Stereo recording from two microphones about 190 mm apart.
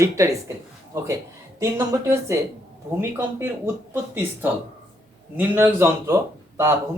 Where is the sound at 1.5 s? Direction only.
15° right (ahead or behind).